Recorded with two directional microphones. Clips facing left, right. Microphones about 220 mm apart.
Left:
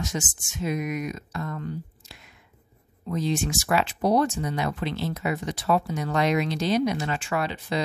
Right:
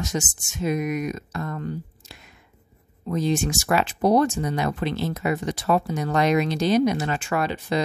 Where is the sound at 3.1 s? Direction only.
45° right (ahead or behind).